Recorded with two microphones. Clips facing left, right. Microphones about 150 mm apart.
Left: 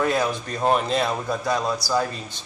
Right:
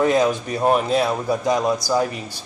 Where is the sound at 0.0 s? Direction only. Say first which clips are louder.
Right 5 dB; 15° right (ahead or behind).